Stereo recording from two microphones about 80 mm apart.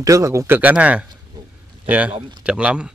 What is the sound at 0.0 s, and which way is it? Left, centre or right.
Speech, right.